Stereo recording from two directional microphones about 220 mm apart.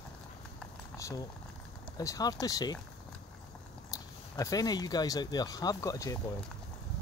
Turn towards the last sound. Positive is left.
turn(degrees=15)  # may be behind; listen again after turning